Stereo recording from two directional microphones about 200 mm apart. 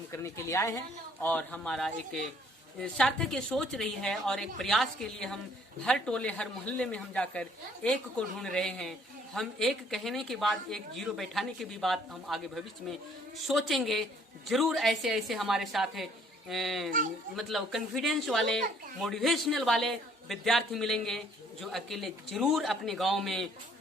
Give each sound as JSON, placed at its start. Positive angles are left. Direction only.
{"t": 0.1, "sound": "a woman's voice", "side_deg": 15}